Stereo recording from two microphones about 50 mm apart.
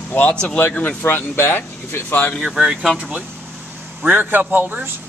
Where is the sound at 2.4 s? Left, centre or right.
Centre.